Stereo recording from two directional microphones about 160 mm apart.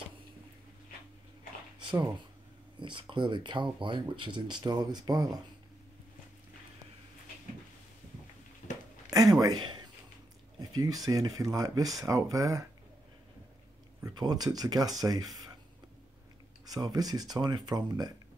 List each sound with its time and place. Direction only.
1.9 s speech: 30° right (ahead or behind)
9.1 s a sound: 20° right (ahead or behind)
10.6 s speech: 20° right (ahead or behind)
14.0 s speech: 25° right (ahead or behind)
16.6 s speech: 25° right (ahead or behind)